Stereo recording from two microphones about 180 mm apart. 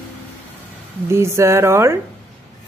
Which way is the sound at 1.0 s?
15° right (ahead or behind).